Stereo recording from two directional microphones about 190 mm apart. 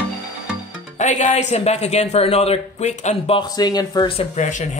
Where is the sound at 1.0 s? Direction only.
40° left (ahead or behind).